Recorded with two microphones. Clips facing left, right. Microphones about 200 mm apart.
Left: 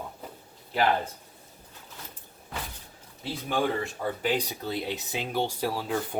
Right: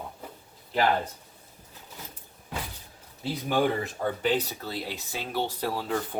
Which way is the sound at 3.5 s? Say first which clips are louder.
Right 2 dB; centre (ahead or behind).